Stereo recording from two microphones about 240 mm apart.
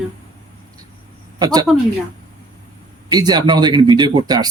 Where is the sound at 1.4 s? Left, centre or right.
Centre.